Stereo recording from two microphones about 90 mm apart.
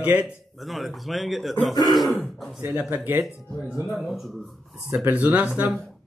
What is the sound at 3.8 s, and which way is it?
Speech, centre (ahead or behind).